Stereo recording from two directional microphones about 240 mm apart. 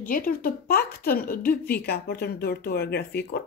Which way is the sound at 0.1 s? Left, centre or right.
Left.